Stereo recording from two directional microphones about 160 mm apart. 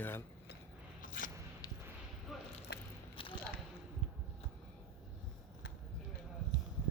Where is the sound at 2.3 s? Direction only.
Centre (ahead or behind).